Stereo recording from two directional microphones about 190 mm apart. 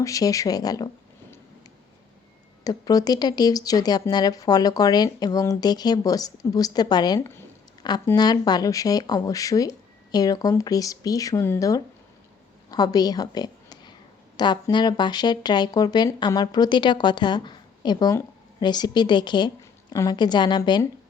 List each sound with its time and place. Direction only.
0.0 s a woman's voice: 15° left (ahead or behind)
2.6 s a woman's voice: 20° left (ahead or behind)